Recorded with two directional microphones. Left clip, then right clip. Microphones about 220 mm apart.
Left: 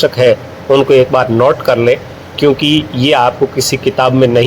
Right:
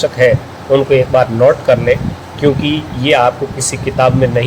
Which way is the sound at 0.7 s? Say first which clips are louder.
Left 2 dB; 25° left (ahead or behind).